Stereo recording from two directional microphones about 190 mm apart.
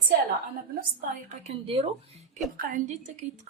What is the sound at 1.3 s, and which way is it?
Speech, 35° right (ahead or behind).